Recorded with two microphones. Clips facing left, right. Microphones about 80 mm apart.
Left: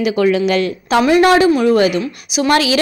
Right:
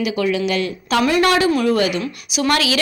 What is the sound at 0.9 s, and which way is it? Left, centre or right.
Speech, centre.